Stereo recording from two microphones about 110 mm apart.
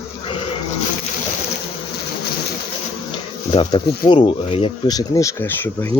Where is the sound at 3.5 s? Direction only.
50° left (ahead or behind).